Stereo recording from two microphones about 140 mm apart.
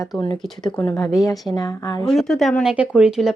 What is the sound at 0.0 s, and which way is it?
Speech, 30° left (ahead or behind).